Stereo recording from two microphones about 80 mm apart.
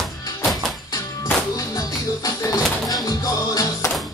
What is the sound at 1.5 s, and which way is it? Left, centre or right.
Music, left.